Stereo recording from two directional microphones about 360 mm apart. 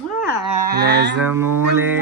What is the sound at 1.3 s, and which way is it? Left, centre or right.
Music, right.